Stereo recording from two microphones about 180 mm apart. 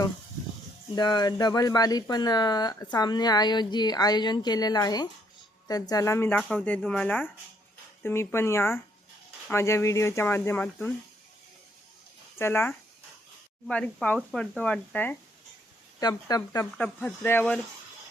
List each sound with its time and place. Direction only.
0.9 s speech: 20° left (ahead or behind)
12.4 s speech: 15° left (ahead or behind)
16.0 s speech: 20° left (ahead or behind)
16.7 s speech: 5° left (ahead or behind)